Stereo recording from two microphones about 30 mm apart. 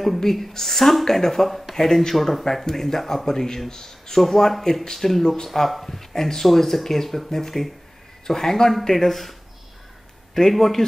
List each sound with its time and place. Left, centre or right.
0.2 s speech: centre